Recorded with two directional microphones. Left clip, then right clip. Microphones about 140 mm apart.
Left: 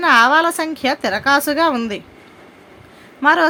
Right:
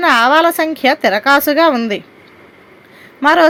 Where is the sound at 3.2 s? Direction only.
25° right (ahead or behind).